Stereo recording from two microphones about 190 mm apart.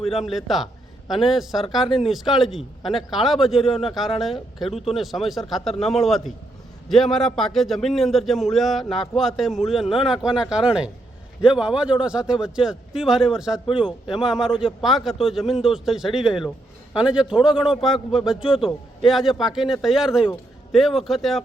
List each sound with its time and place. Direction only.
0.1 s a man's voice: centre (ahead or behind)
18.4 s a man's voice: 30° left (ahead or behind)
19.0 s a man's voice: centre (ahead or behind)